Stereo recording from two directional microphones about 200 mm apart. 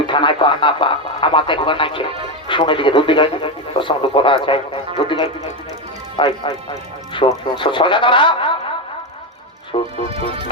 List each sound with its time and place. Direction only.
0.1 s speech: 25° left (ahead or behind)
9.7 s speech: 35° left (ahead or behind)